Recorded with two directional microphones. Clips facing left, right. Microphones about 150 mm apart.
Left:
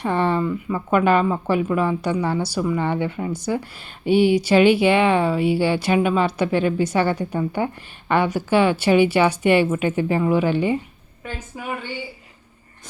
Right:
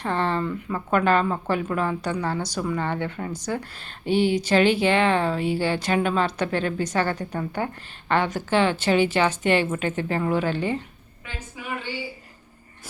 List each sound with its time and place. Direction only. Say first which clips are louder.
0.0 s speech: left 4 dB; 15° left (ahead or behind)
11.2 s a woman's voice: left 5 dB; 45° left (ahead or behind)